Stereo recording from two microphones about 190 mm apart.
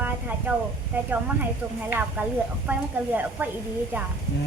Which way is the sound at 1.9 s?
10° right (ahead or behind).